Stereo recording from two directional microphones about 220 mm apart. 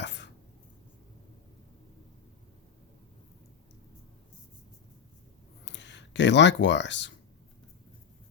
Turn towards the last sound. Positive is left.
turn(degrees=55)  # may be behind; listen again after turning